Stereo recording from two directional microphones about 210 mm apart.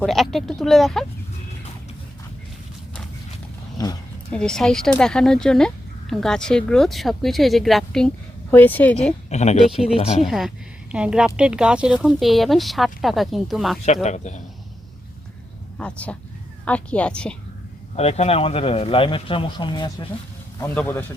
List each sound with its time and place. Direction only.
0.0 s speech: centre (ahead or behind)
4.3 s speech: 5° left (ahead or behind)
9.3 s speech: 35° left (ahead or behind)
10.2 s speech: centre (ahead or behind)
13.8 s speech: 35° left (ahead or behind)
15.8 s speech: 5° left (ahead or behind)
17.9 s speech: 30° left (ahead or behind)
20.6 s speech: 10° left (ahead or behind)